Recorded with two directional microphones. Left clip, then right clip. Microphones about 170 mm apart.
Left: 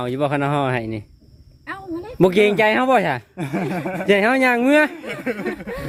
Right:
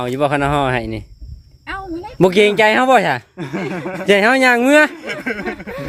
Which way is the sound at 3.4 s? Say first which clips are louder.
Right 1 dB; 85° left.